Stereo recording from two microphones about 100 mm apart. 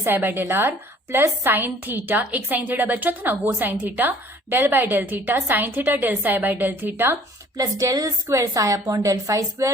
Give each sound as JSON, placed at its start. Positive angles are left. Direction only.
{"t": 0.0, "sound": "a woman's voice", "side_deg": -20}
{"t": 7.5, "sound": "a woman's voice", "side_deg": -35}